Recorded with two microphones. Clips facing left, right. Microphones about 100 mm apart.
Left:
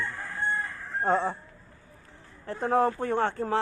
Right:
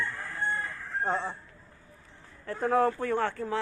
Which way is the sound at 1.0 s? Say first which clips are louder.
Left 5 dB; 45° left (ahead or behind).